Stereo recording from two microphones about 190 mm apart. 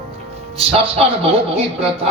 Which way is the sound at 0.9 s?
30° right (ahead or behind).